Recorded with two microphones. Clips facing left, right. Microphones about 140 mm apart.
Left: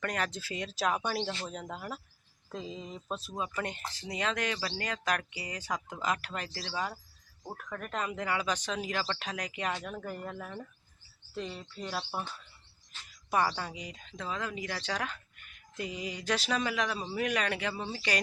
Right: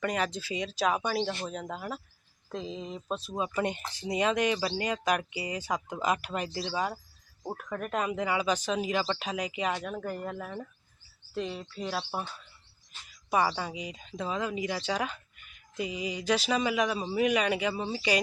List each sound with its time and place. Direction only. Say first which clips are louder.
0.0 s speech: right 4 dB; 5° right (ahead or behind)
2.5 s speech: right 3 dB; 5° left (ahead or behind)
2.8 s speech: right 4 dB; 10° right (ahead or behind)
16.2 s speech: right 4 dB; 5° right (ahead or behind)